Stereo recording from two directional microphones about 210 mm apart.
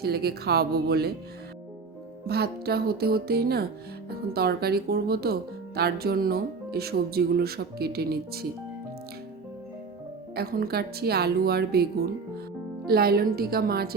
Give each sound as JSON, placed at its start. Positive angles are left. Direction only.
{"t": 0.0, "sound": "speech", "side_deg": -50}
{"t": 2.2, "sound": "speech", "side_deg": -50}
{"t": 10.3, "sound": "speech", "side_deg": -45}